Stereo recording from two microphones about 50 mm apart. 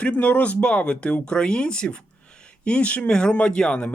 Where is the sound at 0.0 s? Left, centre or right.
Left.